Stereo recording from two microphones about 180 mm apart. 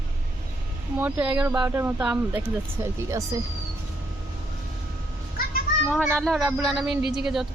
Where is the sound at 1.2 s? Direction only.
25° right (ahead or behind).